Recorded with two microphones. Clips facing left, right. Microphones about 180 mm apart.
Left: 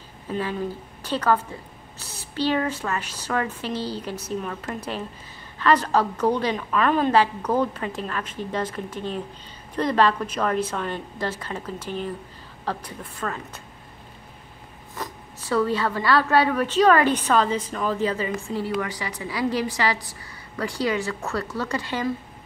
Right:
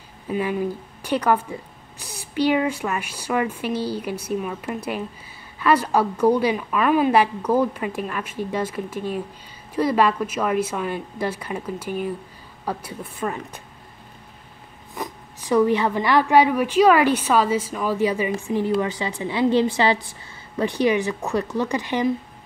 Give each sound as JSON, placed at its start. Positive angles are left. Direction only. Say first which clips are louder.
{"t": 0.3, "sound": "a woman's voice", "louder": "right 4 dB", "side_deg": -15}
{"t": 15.0, "sound": "a woman's voice", "louder": "right 3 dB", "side_deg": -15}
{"t": 18.7, "sound": "a woman's voice", "louder": "right 5 dB", "side_deg": -25}